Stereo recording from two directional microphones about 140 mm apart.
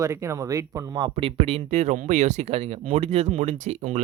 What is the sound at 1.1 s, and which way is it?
Speech, 45° right (ahead or behind).